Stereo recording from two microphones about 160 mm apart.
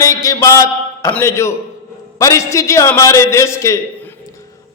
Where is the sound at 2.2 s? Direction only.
20° left (ahead or behind).